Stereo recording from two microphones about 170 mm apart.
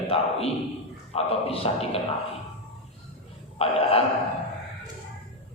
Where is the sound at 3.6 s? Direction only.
35° left (ahead or behind).